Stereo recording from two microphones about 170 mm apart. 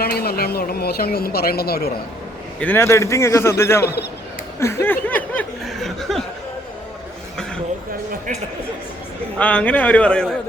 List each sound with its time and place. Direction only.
0.0 s speech: 65° left (ahead or behind)
2.6 s a man's voice: 10° left (ahead or behind)
5.0 s snicker: 10° left (ahead or behind)
9.4 s a man's voice: 10° left (ahead or behind)